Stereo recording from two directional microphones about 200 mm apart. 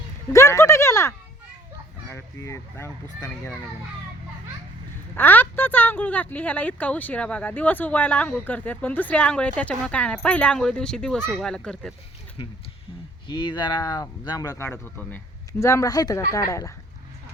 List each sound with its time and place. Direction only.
0.3 s a sound: 15° left (ahead or behind)
2.0 s speech: 15° left (ahead or behind)
5.1 s speech: 10° left (ahead or behind)
11.2 s speech: 5° right (ahead or behind)
11.4 s speech: 5° left (ahead or behind)
13.2 s speech: 25° left (ahead or behind)